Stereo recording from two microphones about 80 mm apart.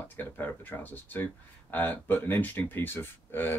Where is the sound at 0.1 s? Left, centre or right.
Left.